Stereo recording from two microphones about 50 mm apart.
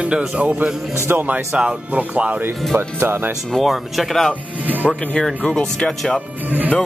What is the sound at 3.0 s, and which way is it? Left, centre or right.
Speech, right.